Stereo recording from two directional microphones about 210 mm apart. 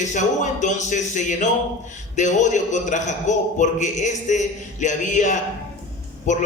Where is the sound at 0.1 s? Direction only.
35° left (ahead or behind).